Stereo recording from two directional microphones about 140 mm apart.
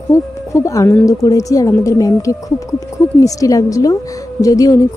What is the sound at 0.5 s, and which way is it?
A woman's voice, 20° left (ahead or behind).